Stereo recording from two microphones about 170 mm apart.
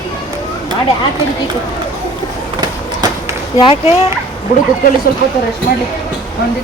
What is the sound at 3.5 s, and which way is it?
Speech, 30° left (ahead or behind).